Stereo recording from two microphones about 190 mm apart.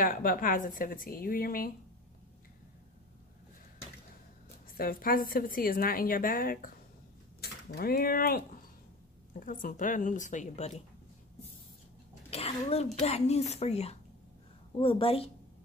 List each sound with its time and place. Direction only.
0.0 s a woman's voice: 45° left (ahead or behind)
4.7 s a woman's voice: 50° left (ahead or behind)
12.3 s a woman's voice: 30° left (ahead or behind)